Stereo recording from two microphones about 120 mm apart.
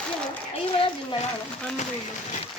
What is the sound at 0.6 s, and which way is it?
Speech, 50° left (ahead or behind).